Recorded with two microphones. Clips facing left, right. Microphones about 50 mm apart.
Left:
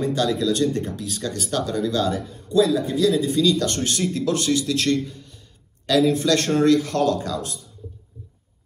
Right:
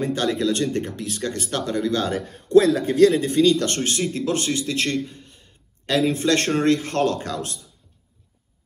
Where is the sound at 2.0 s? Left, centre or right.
Right.